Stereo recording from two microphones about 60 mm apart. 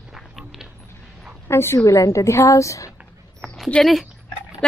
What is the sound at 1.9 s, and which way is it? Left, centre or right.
A woman's voice, left.